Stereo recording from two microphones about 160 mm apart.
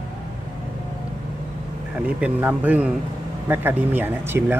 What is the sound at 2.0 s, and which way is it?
Speech, 10° right (ahead or behind).